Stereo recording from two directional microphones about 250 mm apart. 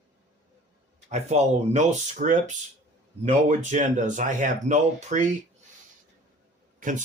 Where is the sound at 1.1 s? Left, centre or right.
Right.